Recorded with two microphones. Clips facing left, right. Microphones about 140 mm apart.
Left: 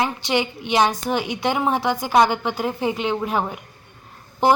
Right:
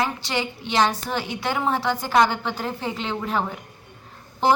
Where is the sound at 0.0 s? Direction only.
15° left (ahead or behind).